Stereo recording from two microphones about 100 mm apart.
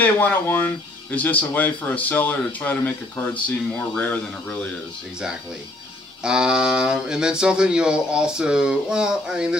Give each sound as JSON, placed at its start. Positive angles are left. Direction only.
{"t": 0.0, "sound": "a man's voice", "side_deg": 20}
{"t": 6.2, "sound": "speech", "side_deg": -10}